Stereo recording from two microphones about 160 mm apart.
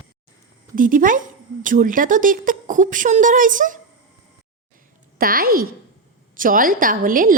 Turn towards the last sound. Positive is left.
turn(degrees=-60)  # may be behind; listen again after turning